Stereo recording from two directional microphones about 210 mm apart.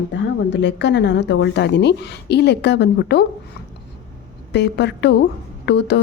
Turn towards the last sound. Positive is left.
turn(degrees=55)  # may be behind; listen again after turning